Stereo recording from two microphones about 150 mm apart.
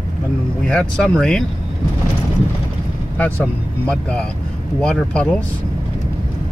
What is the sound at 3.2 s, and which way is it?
Speech, 10° left (ahead or behind).